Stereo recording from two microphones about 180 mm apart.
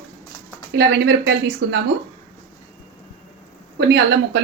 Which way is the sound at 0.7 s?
70° right (ahead or behind).